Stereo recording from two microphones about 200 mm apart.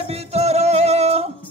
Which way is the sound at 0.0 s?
30° right (ahead or behind).